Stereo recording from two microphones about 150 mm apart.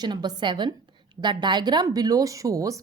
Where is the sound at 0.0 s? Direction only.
30° right (ahead or behind).